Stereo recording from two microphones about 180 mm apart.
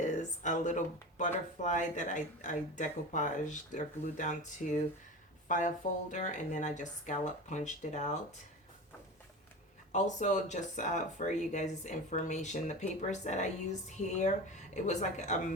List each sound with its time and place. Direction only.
0.0 s speech: 40° left (ahead or behind)
9.9 s speech: 40° left (ahead or behind)